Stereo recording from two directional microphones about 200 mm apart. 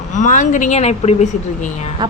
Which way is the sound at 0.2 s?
40° left (ahead or behind).